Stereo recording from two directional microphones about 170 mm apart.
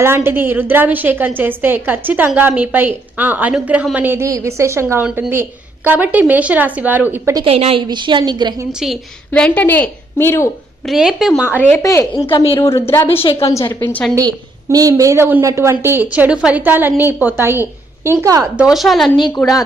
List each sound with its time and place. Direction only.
0.0 s a woman's voice: 15° right (ahead or behind)
7.4 s a woman's voice: 35° right (ahead or behind)
8.7 s a woman's voice: centre (ahead or behind); by 10.5 s 15° left (ahead or behind)
10.8 s a woman's voice: centre (ahead or behind)
11.8 s a woman's voice: 20° left (ahead or behind)
12.2 s a woman's voice: 30° left (ahead or behind)
12.6 s a woman's voice: 15° left (ahead or behind)
14.2 s a woman's voice: 20° right (ahead or behind)
18.5 s a woman's voice: 5° right (ahead or behind)